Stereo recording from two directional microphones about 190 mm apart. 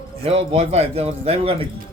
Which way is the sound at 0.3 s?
30° right (ahead or behind).